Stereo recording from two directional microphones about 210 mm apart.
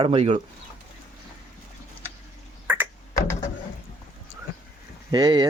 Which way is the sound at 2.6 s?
10° right (ahead or behind).